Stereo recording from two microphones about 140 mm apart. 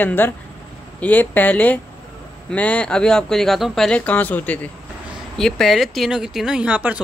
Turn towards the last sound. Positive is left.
turn(degrees=-10)  # may be behind; listen again after turning